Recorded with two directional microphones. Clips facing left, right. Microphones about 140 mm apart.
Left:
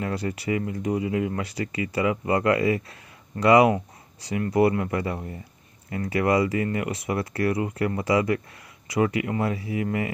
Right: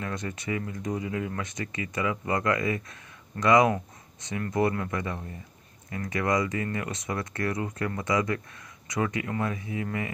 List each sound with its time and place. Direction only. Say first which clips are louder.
0.0 s speech: left 5 dB; 30° left (ahead or behind)